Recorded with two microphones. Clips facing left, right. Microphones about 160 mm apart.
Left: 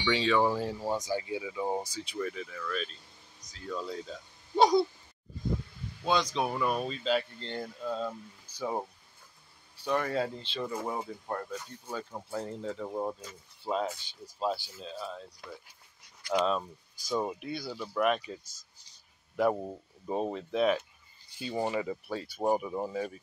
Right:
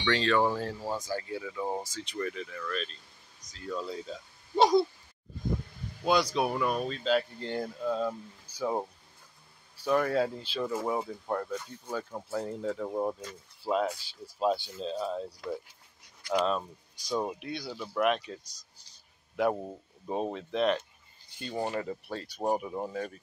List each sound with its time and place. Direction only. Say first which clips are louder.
0.0 s speech: even; 5° left (ahead or behind)
6.0 s speech: right 2 dB; 10° right (ahead or behind)
7.3 s speech: right 4 dB; 10° right (ahead or behind)
9.8 s speech: right 3 dB; centre (ahead or behind)
14.4 s speech: right 4 dB; 20° right (ahead or behind)
16.3 s speech: even; centre (ahead or behind)
22.8 s speech: left 1 dB; 5° left (ahead or behind)